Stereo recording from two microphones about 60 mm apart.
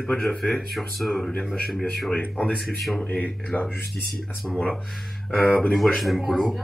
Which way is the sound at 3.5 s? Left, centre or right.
Left.